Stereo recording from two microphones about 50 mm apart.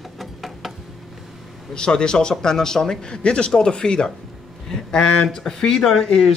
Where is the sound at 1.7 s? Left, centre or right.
Centre.